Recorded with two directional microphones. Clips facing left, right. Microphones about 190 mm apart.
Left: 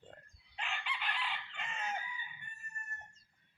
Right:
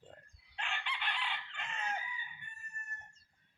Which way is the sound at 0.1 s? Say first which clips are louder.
Even; 5° left (ahead or behind).